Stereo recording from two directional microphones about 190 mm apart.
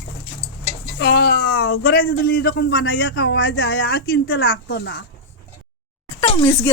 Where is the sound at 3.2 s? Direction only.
70° left (ahead or behind); by 3.7 s 85° left.